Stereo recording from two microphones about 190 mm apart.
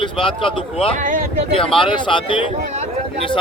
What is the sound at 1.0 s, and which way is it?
Speech, 45° right (ahead or behind).